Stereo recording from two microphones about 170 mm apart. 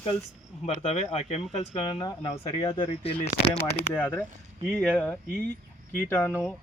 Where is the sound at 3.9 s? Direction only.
5° left (ahead or behind).